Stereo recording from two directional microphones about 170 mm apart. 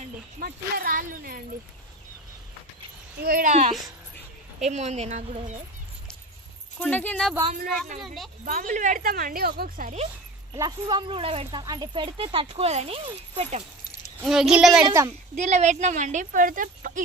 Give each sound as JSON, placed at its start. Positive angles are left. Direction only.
{"t": 0.4, "sound": "speech", "side_deg": -55}
{"t": 3.3, "sound": "speech", "side_deg": -50}
{"t": 6.8, "sound": "speech", "side_deg": 10}
{"t": 8.5, "sound": "speech", "side_deg": -50}
{"t": 10.5, "sound": "a woman's voice", "side_deg": -20}
{"t": 14.2, "sound": "speech", "side_deg": -5}
{"t": 14.9, "sound": "a child's voice", "side_deg": -15}
{"t": 15.3, "sound": "speech", "side_deg": -45}